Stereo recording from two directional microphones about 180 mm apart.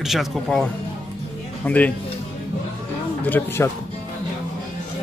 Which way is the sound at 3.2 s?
10° left (ahead or behind).